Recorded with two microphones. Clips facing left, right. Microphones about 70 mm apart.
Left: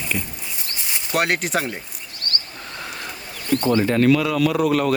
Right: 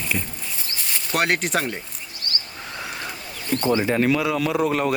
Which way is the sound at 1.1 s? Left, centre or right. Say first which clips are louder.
Left 1 dB; centre.